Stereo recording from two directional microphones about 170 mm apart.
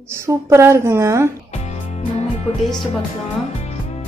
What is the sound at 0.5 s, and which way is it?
Speech, 15° right (ahead or behind).